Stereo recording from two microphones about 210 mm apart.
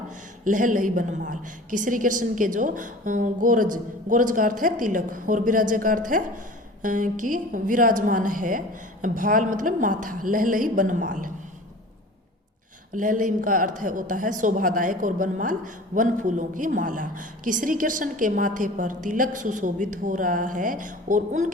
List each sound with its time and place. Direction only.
0.4 s a woman's voice: 40° right (ahead or behind)
12.9 s a woman's voice: 40° right (ahead or behind)